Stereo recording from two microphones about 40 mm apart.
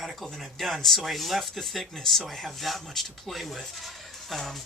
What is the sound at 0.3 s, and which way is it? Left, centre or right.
Speech, centre.